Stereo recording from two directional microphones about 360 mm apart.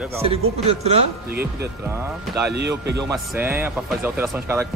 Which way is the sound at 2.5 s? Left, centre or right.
Right.